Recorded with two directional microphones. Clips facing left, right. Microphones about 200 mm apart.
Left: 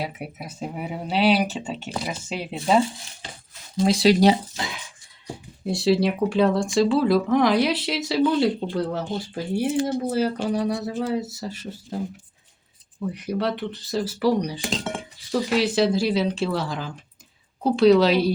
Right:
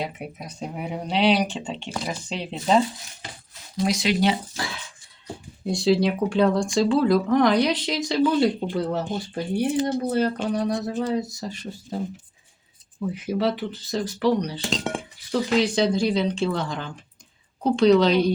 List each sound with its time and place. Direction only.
0.0 s speech: 5° left (ahead or behind)
3.8 s speech: 30° left (ahead or behind)
4.5 s speech: 20° left (ahead or behind)
5.6 s speech: 5° left (ahead or behind)
10.4 s a sound: 5° left (ahead or behind)
11.0 s speech: 5° left (ahead or behind)